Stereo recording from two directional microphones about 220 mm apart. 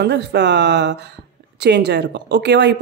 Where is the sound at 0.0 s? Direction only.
50° right (ahead or behind).